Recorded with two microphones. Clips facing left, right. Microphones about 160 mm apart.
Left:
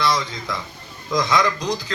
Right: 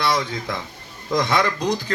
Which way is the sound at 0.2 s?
55° right (ahead or behind).